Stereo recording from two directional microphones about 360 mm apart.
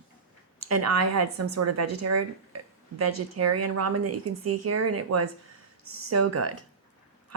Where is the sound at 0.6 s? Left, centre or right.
Right.